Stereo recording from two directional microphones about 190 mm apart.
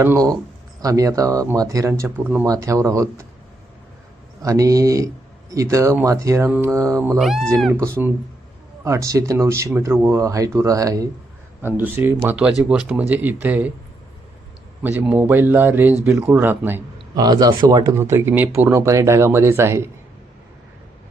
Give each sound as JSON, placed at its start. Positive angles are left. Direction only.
{"t": 0.0, "sound": "speech", "side_deg": -15}
{"t": 4.4, "sound": "speech", "side_deg": -20}
{"t": 7.2, "sound": "speech", "side_deg": 0}
{"t": 7.7, "sound": "speech", "side_deg": -15}
{"t": 14.8, "sound": "speech", "side_deg": -10}
{"t": 17.2, "sound": "speech", "side_deg": -20}